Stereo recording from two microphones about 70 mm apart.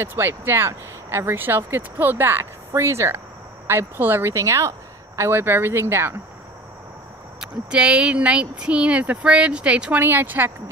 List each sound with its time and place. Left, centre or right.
0.0 s speech: right
7.3 s speech: centre
9.9 s speech: right